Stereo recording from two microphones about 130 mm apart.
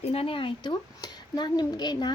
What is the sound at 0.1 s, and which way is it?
A woman's voice, 45° left (ahead or behind).